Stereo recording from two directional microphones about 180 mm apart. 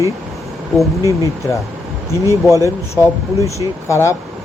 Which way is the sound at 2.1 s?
15° left (ahead or behind).